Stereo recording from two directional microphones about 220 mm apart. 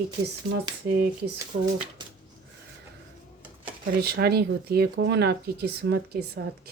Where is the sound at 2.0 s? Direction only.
20° right (ahead or behind).